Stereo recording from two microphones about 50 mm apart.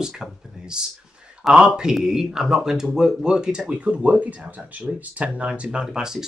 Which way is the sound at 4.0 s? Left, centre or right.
Right.